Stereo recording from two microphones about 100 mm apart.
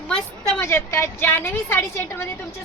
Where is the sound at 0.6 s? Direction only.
25° left (ahead or behind).